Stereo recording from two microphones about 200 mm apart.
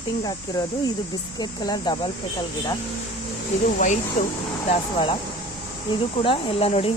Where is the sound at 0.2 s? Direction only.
20° left (ahead or behind).